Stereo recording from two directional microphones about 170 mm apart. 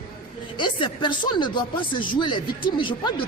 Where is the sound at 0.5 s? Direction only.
30° left (ahead or behind).